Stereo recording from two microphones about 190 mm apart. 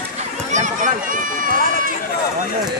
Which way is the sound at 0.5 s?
40° right (ahead or behind).